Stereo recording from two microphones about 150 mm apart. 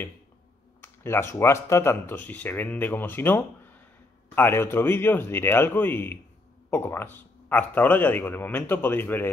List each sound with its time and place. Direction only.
0.7 s speech: 15° left (ahead or behind)